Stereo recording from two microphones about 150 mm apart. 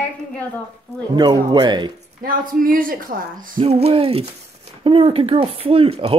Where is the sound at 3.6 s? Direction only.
40° right (ahead or behind).